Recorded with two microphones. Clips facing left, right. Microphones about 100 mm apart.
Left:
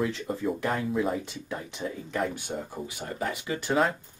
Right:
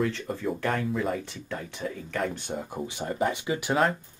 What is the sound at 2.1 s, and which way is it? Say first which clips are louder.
Speech: even; 5° left (ahead or behind).